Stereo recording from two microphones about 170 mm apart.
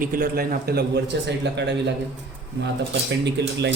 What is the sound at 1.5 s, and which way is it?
Speech, 90° right.